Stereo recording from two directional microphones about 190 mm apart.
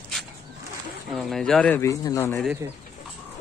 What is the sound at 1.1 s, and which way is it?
Speech, centre (ahead or behind).